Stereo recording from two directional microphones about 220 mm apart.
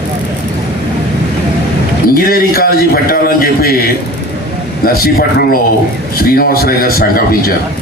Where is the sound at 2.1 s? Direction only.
40° left (ahead or behind).